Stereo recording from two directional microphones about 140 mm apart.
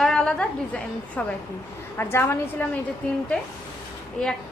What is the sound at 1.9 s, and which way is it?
Speech, 15° left (ahead or behind).